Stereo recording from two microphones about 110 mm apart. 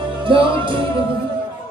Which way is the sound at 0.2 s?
50° right (ahead or behind).